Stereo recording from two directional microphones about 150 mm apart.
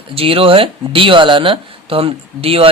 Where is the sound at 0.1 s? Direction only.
40° right (ahead or behind).